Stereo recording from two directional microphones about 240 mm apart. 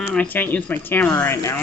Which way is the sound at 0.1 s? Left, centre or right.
Centre.